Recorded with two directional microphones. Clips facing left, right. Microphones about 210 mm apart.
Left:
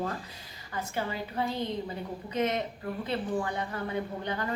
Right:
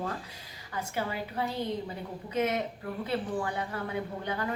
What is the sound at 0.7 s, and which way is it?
A woman's voice, 10° right (ahead or behind).